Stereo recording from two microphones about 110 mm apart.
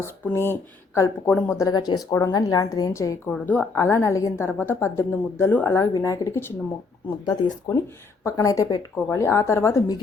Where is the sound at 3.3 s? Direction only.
15° left (ahead or behind).